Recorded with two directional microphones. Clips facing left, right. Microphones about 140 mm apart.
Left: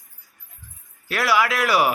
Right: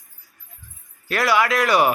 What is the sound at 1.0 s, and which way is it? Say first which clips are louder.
Speech: right 1 dB; 5° left (ahead or behind).